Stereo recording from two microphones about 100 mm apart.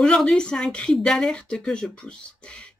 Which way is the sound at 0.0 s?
5° left (ahead or behind).